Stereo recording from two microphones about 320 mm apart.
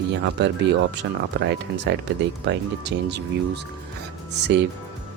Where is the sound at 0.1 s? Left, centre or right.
Right.